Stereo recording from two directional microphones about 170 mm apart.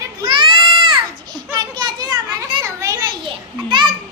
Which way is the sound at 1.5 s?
25° right (ahead or behind).